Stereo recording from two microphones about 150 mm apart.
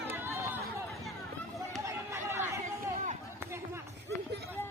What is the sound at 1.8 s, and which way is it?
Chatter, 20° right (ahead or behind).